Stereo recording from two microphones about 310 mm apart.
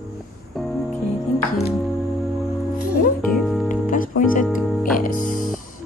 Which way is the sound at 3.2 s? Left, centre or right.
Centre.